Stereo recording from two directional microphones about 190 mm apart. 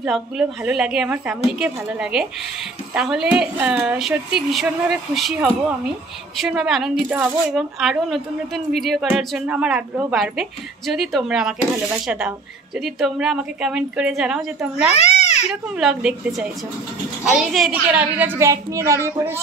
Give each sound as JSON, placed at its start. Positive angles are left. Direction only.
{"t": 0.0, "sound": "a woman's voice", "side_deg": -5}
{"t": 15.0, "sound": "babbling", "side_deg": 35}
{"t": 15.8, "sound": "a woman's voice", "side_deg": -5}